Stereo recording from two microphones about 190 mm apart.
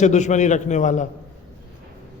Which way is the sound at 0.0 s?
40° left (ahead or behind).